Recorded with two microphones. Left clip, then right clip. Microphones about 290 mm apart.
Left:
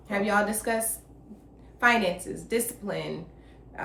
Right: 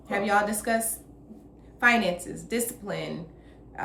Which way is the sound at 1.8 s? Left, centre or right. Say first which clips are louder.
Right 1 dB; centre.